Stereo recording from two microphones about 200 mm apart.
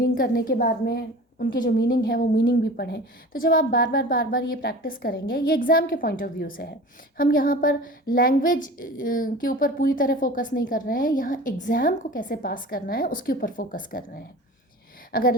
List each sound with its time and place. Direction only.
0.0 s a woman's voice: 45° left (ahead or behind)